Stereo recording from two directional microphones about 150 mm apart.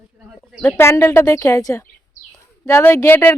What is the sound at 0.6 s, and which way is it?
Speech, 15° left (ahead or behind).